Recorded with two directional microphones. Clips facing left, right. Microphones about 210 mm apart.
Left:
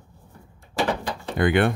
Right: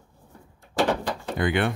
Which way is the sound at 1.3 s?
55° left (ahead or behind).